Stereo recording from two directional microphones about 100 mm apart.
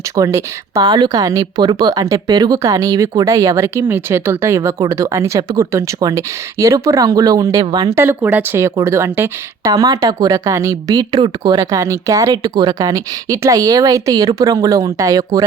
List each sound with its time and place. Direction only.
0.2 s speech: 30° right (ahead or behind)
7.6 s speech: 45° right (ahead or behind)
7.9 s speech: 25° right (ahead or behind)
9.6 s speech: 40° right (ahead or behind)